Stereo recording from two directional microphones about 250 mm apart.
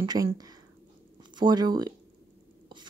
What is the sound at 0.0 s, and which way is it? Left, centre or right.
Speech, centre.